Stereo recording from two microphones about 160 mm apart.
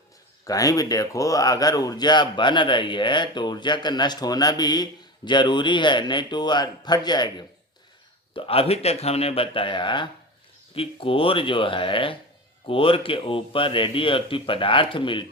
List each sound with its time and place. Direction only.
0.4 s a man's voice: 20° left (ahead or behind)